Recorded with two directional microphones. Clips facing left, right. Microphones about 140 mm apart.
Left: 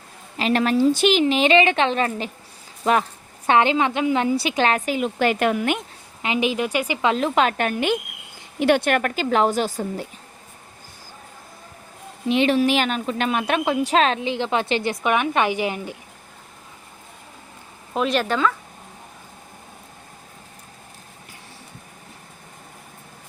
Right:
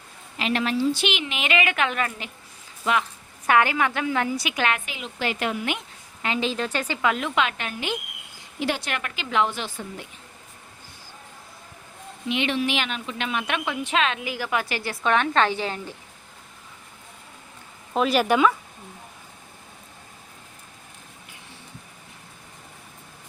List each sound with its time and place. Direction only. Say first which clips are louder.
0.3 s a woman's voice: left 5 dB; 40° left (ahead or behind)
2.8 s a sound: left 5 dB; 35° left (ahead or behind)
3.5 s a woman's voice: left 3 dB; 20° left (ahead or behind); by 5.8 s 50° left (ahead or behind)
6.2 s speech: left 4 dB; 15° left (ahead or behind)
7.0 s a woman's voice: left 4 dB; 30° left (ahead or behind)
12.3 s speech: left 7 dB; 40° left (ahead or behind); by 16.0 s 15° left (ahead or behind)
17.9 s speech: right 1 dB; 5° right (ahead or behind)